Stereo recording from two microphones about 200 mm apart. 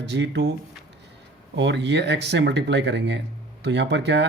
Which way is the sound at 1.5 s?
60° right (ahead or behind).